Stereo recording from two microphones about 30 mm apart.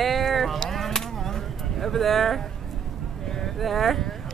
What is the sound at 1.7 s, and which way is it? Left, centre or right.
Speech, centre.